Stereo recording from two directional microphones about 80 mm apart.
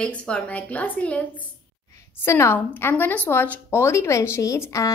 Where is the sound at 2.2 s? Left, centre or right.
Left.